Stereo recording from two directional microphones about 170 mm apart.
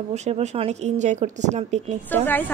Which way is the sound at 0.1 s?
40° right (ahead or behind).